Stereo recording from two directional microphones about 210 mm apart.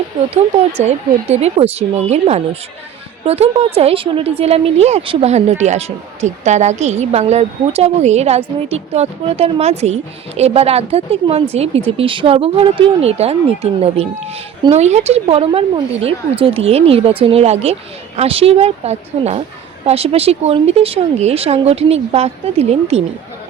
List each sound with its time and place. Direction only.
0.1 s a woman's voice: 20° right (ahead or behind)
0.8 s a woman's voice: 30° right (ahead or behind)